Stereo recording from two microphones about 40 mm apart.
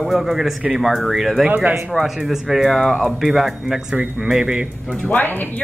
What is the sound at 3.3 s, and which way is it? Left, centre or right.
Speech, centre.